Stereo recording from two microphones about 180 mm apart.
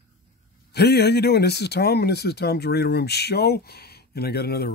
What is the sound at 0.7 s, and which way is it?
Speech, 65° left (ahead or behind).